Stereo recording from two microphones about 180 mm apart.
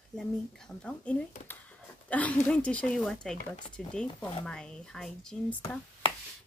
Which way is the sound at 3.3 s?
45° left (ahead or behind).